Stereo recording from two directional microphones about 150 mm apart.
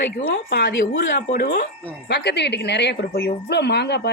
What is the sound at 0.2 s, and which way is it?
A woman's voice, 90° left.